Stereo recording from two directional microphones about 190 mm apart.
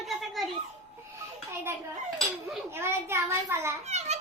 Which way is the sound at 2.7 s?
10° right (ahead or behind).